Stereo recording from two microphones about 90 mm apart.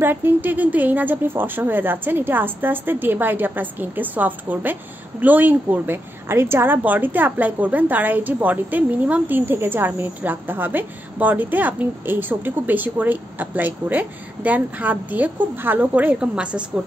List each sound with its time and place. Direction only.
0.0 s a woman's voice: 25° right (ahead or behind)